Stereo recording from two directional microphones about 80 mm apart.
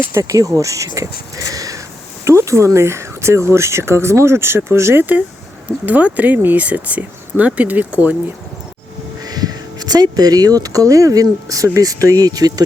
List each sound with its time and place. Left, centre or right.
0.1 s speech: right
0.9 s a sound: right
2.2 s speech: right
5.8 s speech: centre
9.2 s speech: right